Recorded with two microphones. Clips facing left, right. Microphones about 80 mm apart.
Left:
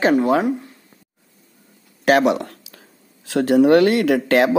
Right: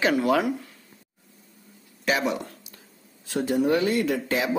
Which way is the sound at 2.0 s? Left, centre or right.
Left.